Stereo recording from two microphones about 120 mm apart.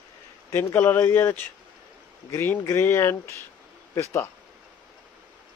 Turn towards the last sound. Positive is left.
turn(degrees=25)  # may be behind; listen again after turning